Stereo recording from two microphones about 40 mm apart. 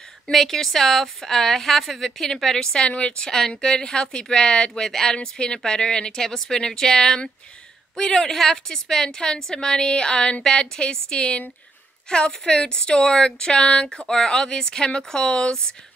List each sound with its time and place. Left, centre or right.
0.3 s a woman's voice: centre
2.5 s a woman's voice: centre
3.3 s a woman's voice: centre